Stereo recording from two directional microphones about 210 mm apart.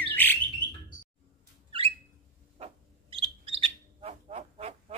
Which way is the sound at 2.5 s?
30° right (ahead or behind).